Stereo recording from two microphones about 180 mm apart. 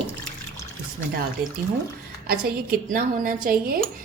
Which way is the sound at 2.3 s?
55° right (ahead or behind).